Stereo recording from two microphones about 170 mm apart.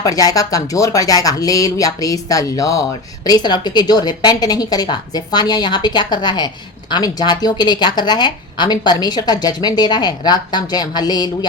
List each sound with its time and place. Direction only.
0.0 s speech: 20° left (ahead or behind)